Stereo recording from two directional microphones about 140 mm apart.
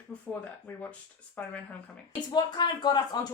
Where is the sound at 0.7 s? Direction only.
15° left (ahead or behind).